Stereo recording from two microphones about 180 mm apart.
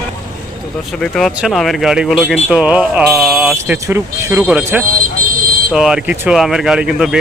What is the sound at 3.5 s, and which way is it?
Speech, 15° right (ahead or behind).